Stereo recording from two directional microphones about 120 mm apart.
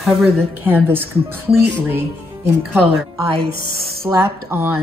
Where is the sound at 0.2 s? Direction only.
15° right (ahead or behind).